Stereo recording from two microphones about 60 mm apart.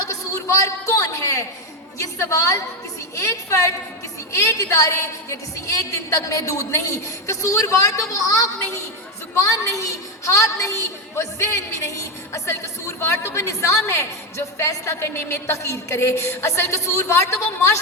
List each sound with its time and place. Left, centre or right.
0.1 s a sound: left
2.1 s a woman's voice: left
4.6 s a woman's voice: left
4.9 s a woman's voice: left